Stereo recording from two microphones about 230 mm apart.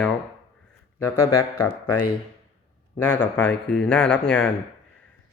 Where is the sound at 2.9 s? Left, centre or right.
Centre.